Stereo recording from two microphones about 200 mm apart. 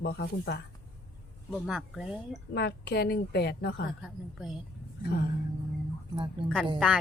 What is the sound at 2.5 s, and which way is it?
Speech, 55° left (ahead or behind).